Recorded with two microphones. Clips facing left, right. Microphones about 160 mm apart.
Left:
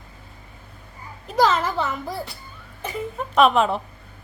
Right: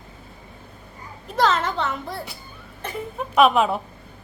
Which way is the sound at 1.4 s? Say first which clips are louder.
Left 1 dB; centre (ahead or behind).